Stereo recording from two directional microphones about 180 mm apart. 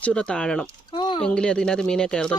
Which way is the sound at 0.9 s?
25° left (ahead or behind).